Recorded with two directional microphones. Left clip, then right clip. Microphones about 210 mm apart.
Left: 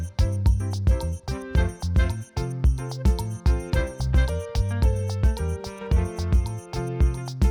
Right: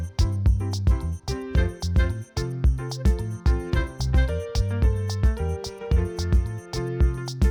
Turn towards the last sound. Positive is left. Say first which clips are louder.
# right 1 dB
turn(degrees=0)  # may be behind; listen again after turning